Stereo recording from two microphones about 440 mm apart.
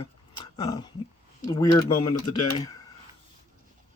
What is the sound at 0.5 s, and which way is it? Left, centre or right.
Speech, centre.